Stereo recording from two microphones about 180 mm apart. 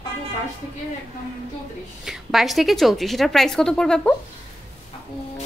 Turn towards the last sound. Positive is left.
turn(degrees=5)  # may be behind; listen again after turning